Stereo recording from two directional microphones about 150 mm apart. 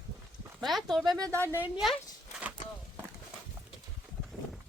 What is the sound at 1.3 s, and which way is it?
Speech, 15° right (ahead or behind).